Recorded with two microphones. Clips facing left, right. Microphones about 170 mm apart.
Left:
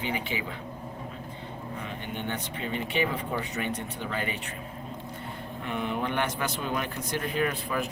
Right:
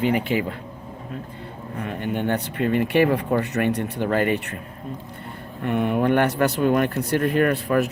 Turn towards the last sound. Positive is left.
turn(degrees=-65)  # may be behind; listen again after turning